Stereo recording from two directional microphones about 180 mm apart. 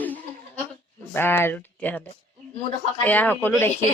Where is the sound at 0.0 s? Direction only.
10° left (ahead or behind).